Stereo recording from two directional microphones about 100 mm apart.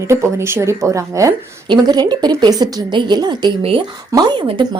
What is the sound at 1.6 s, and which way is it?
Speech, 45° right (ahead or behind).